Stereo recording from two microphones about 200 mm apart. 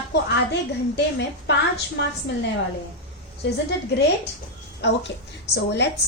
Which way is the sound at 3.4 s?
55° left (ahead or behind).